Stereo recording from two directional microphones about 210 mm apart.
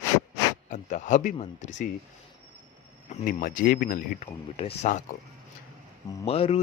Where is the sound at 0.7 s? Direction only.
35° left (ahead or behind).